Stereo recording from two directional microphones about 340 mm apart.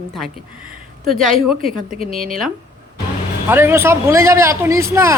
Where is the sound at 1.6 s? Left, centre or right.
Right.